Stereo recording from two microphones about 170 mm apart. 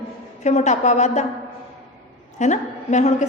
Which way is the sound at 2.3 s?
45° left (ahead or behind).